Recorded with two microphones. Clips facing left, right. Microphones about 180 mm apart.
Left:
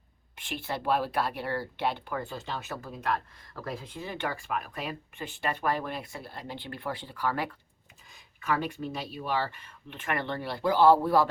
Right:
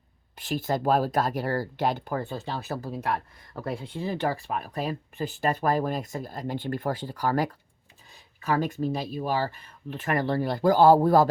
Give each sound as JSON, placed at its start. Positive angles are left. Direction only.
{"t": 0.3, "sound": "speech", "side_deg": -40}